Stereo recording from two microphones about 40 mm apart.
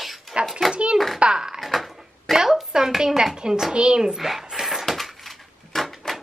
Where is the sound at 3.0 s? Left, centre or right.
Centre.